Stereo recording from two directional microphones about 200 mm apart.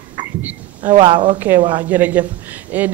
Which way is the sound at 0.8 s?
30° right (ahead or behind).